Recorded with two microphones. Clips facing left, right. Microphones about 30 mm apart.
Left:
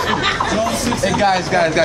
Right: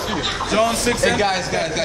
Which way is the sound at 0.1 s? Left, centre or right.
Left.